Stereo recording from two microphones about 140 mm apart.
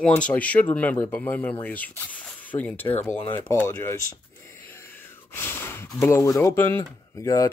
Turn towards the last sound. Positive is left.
turn(degrees=25)  # may be behind; listen again after turning